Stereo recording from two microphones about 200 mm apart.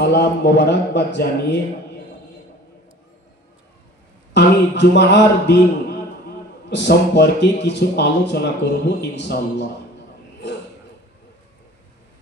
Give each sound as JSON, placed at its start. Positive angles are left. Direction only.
{"t": 0.0, "sound": "a man's voice", "side_deg": 55}
{"t": 4.3, "sound": "a man's voice", "side_deg": 60}